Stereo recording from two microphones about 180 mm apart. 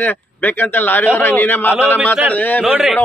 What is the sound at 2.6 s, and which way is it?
Speech, 5° right (ahead or behind).